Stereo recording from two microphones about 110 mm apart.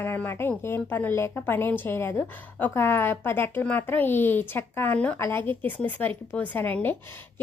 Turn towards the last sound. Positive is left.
turn(degrees=15)  # may be behind; listen again after turning